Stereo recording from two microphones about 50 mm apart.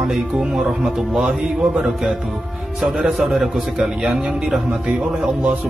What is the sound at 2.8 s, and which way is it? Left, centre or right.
A man's voice, centre.